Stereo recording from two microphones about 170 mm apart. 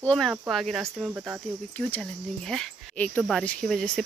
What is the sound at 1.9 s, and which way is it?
Speech, 5° left (ahead or behind).